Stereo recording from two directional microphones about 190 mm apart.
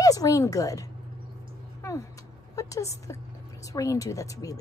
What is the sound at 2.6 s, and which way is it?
A woman's voice, 15° left (ahead or behind).